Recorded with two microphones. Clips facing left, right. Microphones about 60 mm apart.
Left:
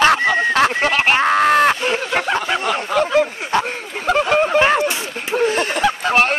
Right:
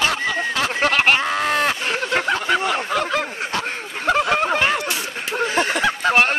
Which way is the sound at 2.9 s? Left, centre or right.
Centre.